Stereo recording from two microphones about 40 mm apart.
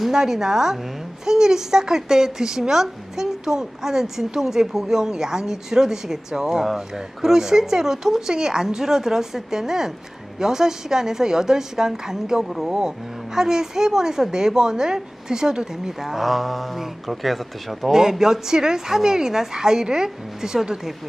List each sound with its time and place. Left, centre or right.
0.1 s a woman's voice: centre
16.0 s speech: centre
17.9 s a woman's voice: centre